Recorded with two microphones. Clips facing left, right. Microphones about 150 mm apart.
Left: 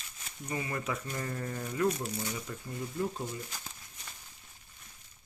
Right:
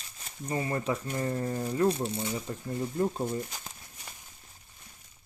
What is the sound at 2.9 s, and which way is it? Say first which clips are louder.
Speech: right 5 dB; 45° right (ahead or behind).